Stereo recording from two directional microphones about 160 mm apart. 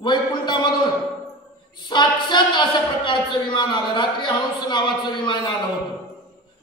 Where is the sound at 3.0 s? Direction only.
30° left (ahead or behind).